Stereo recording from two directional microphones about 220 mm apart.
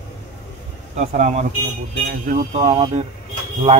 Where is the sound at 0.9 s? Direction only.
30° right (ahead or behind).